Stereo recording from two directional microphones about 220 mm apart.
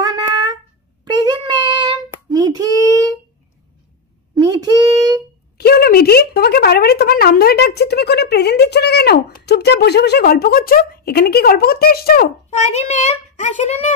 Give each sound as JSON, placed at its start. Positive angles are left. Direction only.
{"t": 1.1, "sound": "a sound", "side_deg": -20}
{"t": 2.3, "sound": "child singing", "side_deg": -15}
{"t": 4.4, "sound": "child singing", "side_deg": -15}
{"t": 5.6, "sound": "speech", "side_deg": 45}